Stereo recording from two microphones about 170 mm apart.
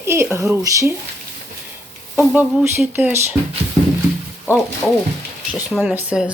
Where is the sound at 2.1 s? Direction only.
10° right (ahead or behind).